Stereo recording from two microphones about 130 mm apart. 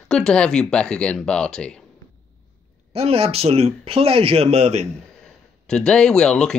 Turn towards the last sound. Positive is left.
turn(degrees=5)  # may be behind; listen again after turning